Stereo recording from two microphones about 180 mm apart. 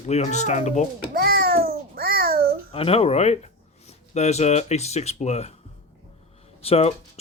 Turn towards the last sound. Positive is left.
turn(degrees=35)  # may be behind; listen again after turning